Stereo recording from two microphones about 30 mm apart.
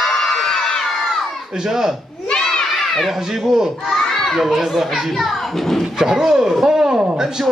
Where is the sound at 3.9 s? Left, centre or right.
Centre.